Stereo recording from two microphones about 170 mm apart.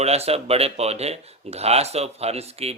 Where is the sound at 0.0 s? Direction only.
40° right (ahead or behind).